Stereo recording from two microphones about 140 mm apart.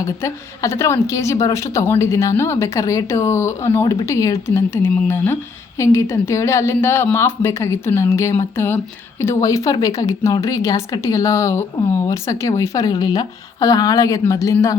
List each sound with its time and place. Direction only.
0.0 s speech: 20° left (ahead or behind)